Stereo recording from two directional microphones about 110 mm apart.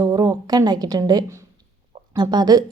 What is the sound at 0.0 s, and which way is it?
A woman's voice, 35° right (ahead or behind).